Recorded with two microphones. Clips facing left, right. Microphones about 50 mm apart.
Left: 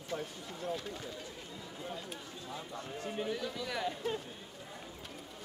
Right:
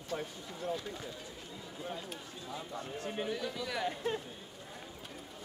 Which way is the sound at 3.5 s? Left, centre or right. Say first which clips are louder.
Even; centre.